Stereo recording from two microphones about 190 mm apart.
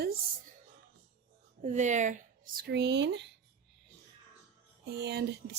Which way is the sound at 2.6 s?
60° right (ahead or behind).